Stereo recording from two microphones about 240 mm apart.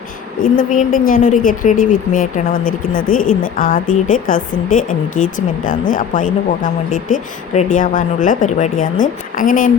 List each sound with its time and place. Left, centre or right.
0.5 s speech: left